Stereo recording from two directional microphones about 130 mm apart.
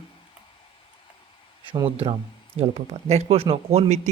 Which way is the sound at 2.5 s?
55° right (ahead or behind).